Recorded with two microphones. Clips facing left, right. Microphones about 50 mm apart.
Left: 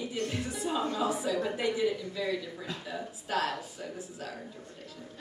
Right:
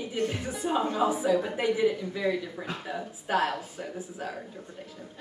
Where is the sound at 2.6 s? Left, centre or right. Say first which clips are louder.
Right 3 dB; right.